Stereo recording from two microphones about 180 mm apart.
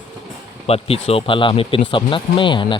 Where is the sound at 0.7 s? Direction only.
30° left (ahead or behind).